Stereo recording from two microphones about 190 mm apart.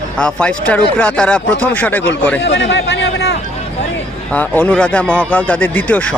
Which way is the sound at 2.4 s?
70° left (ahead or behind).